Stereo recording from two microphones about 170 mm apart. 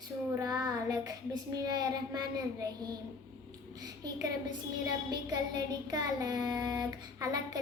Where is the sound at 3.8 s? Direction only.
20° right (ahead or behind).